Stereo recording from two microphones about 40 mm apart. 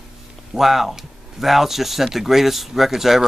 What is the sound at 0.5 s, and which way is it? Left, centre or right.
Speech, centre.